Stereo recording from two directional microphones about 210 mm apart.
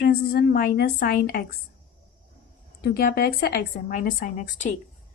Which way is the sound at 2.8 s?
45° left (ahead or behind).